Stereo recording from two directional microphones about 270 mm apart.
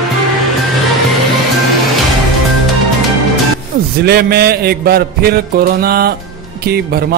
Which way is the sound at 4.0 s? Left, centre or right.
Right.